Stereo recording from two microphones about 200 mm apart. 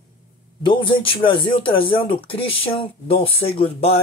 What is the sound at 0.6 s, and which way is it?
Speech, 25° left (ahead or behind).